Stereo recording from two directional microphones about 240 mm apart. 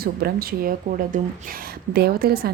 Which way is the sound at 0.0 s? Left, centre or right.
Right.